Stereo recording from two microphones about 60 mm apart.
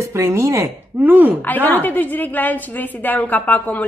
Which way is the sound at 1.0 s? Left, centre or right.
Right.